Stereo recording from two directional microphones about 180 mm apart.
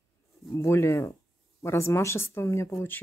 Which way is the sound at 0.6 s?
15° left (ahead or behind).